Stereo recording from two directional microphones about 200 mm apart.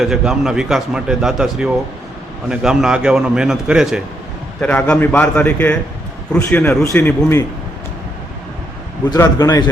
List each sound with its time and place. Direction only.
0.0 s a man's voice: centre (ahead or behind)
4.6 s a man's voice: 10° left (ahead or behind)
9.0 s a man's voice: 20° left (ahead or behind)